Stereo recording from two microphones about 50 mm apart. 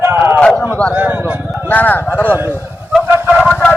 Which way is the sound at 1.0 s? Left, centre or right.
Right.